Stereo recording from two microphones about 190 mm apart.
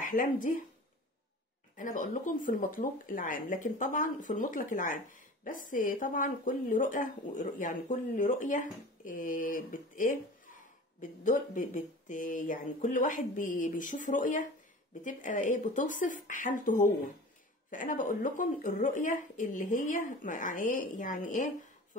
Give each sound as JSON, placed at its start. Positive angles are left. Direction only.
{"t": 0.1, "sound": "speech", "side_deg": 45}
{"t": 1.8, "sound": "speech", "side_deg": 45}